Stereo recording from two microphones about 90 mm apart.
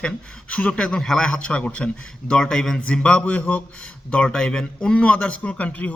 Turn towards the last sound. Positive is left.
turn(degrees=15)  # may be behind; listen again after turning